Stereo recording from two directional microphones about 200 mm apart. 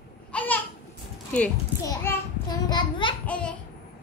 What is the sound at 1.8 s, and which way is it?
A child's voice, 15° left (ahead or behind).